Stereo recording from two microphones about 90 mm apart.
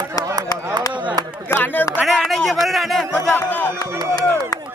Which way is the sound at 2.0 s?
Centre (ahead or behind).